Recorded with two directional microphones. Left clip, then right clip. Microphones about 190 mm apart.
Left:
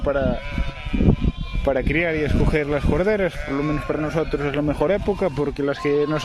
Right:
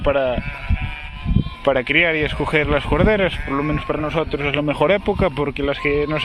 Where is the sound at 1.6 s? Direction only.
10° left (ahead or behind).